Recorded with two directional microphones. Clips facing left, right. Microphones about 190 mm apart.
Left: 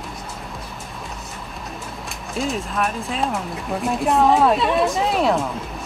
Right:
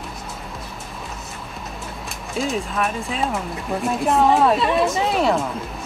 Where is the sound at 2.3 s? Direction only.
Centre (ahead or behind).